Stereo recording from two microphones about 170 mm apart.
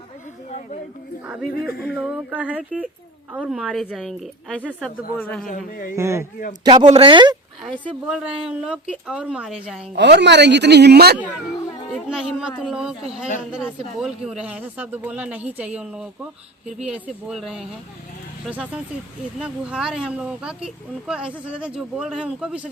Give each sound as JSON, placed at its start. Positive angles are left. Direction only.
{"t": 1.5, "sound": "speech", "side_deg": 65}
{"t": 1.8, "sound": "a man's voice", "side_deg": -5}
{"t": 5.5, "sound": "speech", "side_deg": 50}
{"t": 6.0, "sound": "speech", "side_deg": -15}
{"t": 8.0, "sound": "speech", "side_deg": -5}
{"t": 9.9, "sound": "a woman's voice", "side_deg": -85}
{"t": 11.9, "sound": "speech", "side_deg": 0}